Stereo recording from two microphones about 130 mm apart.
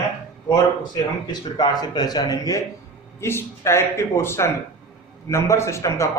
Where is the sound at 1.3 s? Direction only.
35° left (ahead or behind).